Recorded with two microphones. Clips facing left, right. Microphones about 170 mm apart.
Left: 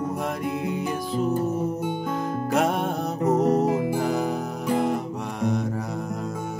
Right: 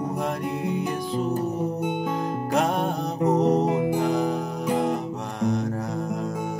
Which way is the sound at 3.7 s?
20° right (ahead or behind).